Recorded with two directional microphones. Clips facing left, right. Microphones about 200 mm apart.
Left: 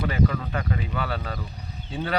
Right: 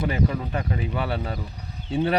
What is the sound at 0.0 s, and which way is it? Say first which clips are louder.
Speech: even; 25° right (ahead or behind).